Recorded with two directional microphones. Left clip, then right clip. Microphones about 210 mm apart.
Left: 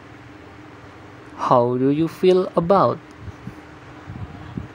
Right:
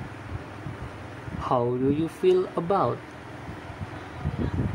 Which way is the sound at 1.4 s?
35° left (ahead or behind).